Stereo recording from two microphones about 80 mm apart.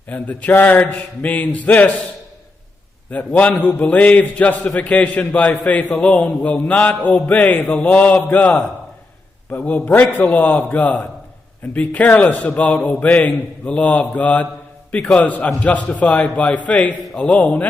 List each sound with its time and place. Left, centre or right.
0.1 s speech: left
3.3 s a man's voice: centre
9.5 s a man's voice: left